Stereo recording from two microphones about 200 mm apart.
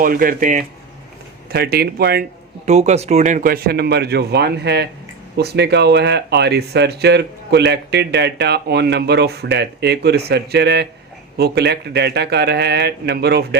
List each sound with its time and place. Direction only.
0.0 s speech: 45° right (ahead or behind)
1.5 s speech: 55° right (ahead or behind)
2.6 s speech: 35° right (ahead or behind); by 13.6 s 55° right (ahead or behind)